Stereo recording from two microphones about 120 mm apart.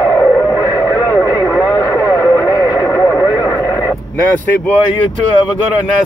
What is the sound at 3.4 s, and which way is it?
Radio, 25° left (ahead or behind).